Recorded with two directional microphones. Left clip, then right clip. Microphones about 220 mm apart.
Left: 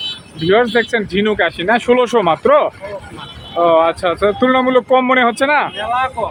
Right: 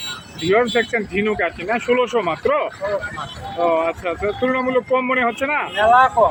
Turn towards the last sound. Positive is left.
turn(degrees=-5)  # may be behind; listen again after turning